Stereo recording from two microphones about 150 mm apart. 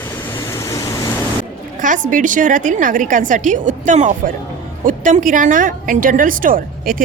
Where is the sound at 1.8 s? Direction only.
60° right (ahead or behind).